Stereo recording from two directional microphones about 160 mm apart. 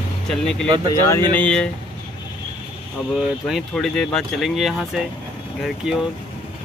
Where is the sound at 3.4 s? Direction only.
Centre (ahead or behind).